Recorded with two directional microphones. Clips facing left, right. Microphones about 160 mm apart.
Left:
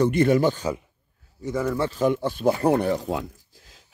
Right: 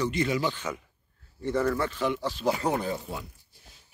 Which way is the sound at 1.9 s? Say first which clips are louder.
Left 6 dB; 45° left (ahead or behind).